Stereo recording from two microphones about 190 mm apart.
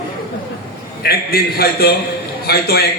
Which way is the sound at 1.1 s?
55° left (ahead or behind).